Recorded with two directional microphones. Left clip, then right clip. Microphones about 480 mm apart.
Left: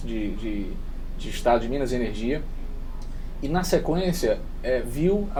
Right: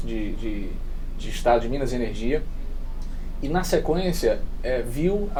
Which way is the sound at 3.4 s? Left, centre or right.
Centre.